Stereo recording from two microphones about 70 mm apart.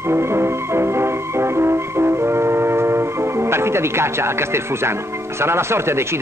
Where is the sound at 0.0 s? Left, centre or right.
Right.